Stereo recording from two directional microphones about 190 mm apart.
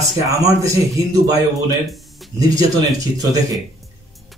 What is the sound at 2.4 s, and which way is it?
Speech, 20° right (ahead or behind).